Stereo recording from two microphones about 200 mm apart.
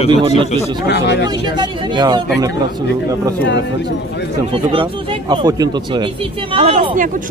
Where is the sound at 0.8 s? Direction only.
55° left (ahead or behind).